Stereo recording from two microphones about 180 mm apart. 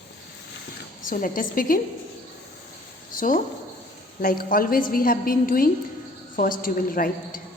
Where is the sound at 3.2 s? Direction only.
50° left (ahead or behind).